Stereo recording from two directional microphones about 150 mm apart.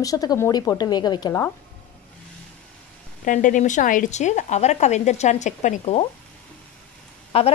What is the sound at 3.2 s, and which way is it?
A woman's voice, 60° left (ahead or behind).